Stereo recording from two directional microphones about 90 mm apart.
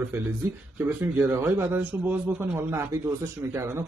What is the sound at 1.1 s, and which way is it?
Speech, 25° right (ahead or behind).